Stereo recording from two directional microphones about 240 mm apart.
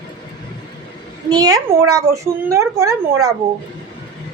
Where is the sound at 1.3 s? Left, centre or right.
Centre.